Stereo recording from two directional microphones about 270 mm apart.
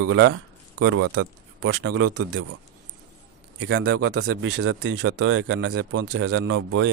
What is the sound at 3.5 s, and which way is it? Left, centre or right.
Speech, right.